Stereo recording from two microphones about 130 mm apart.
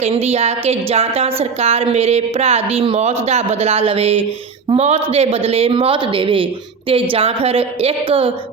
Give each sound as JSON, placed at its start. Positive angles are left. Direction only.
{"t": 0.0, "sound": "a woman's voice", "side_deg": -50}